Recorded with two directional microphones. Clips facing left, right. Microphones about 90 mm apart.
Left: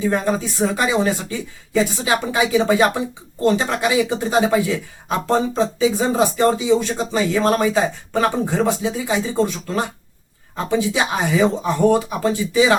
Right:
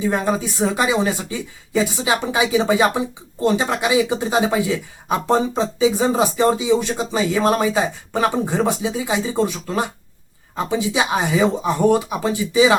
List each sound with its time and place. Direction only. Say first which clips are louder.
0.0 s speech: even; 15° right (ahead or behind)